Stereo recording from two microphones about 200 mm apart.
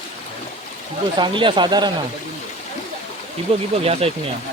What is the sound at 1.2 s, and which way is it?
Speech, 25° right (ahead or behind).